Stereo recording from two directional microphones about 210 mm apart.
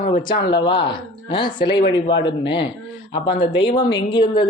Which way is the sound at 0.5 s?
20° left (ahead or behind).